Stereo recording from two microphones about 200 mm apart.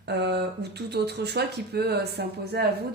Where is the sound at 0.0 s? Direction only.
60° right (ahead or behind).